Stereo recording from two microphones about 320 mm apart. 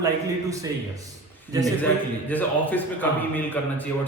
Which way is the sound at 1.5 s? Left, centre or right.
Centre.